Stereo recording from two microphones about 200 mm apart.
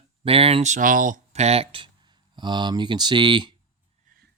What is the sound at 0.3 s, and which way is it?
Speech, 30° right (ahead or behind).